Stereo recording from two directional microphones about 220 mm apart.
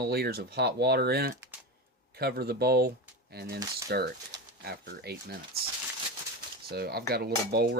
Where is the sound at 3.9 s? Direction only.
45° right (ahead or behind).